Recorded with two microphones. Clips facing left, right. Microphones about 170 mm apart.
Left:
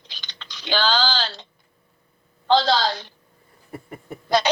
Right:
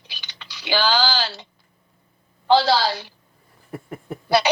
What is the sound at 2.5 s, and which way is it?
Speech, 10° right (ahead or behind).